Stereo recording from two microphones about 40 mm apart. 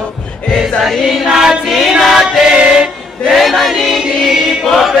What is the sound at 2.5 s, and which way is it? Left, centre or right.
Choir, centre.